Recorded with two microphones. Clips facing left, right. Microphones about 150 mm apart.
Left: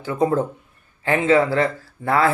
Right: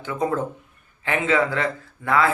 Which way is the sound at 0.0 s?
35° left (ahead or behind).